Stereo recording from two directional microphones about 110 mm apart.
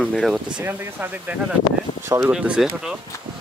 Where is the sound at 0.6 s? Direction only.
20° right (ahead or behind).